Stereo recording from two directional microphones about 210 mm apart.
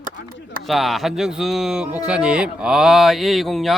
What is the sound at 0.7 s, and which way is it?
Speech, centre (ahead or behind).